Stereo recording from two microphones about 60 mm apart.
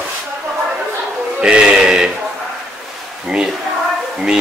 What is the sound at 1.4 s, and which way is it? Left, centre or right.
Speech, centre.